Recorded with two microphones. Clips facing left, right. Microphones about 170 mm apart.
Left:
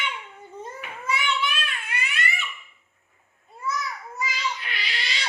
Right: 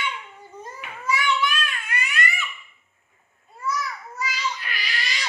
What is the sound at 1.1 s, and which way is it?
Child singing, 25° left (ahead or behind).